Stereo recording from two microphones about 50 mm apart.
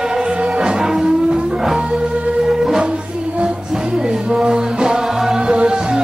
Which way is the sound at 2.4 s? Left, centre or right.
Centre.